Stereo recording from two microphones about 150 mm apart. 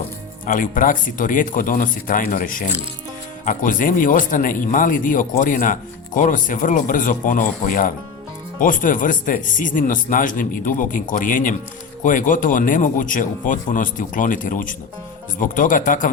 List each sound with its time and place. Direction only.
0.4 s speech: 60° left (ahead or behind)